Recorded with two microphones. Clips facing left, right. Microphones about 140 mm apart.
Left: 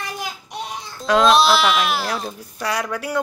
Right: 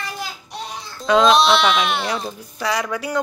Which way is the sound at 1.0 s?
Centre (ahead or behind).